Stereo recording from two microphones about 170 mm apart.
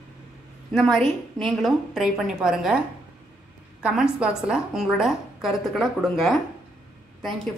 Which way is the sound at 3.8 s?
5° right (ahead or behind).